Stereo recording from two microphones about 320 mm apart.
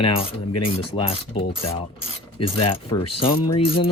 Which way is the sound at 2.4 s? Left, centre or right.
Left.